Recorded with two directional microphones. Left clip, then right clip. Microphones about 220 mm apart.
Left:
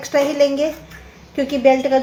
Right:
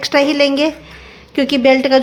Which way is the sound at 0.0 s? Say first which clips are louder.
Right 3 dB; 25° right (ahead or behind).